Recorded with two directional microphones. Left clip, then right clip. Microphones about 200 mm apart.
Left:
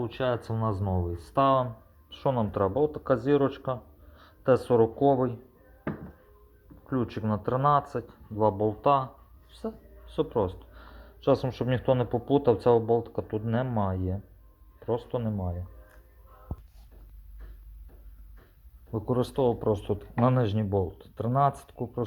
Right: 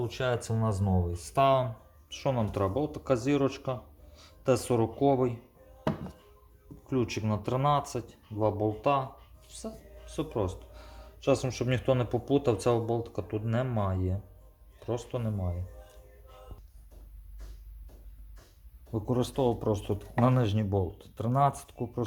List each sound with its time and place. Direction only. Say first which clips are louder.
0.0 s a man's voice: left 2 dB; 10° left (ahead or behind)
6.8 s speech: even; centre (ahead or behind)
8.4 s speech: left 4 dB; 15° left (ahead or behind)
16.5 s music: left 9 dB; 20° right (ahead or behind)
18.9 s speech: left 2 dB; 5° left (ahead or behind)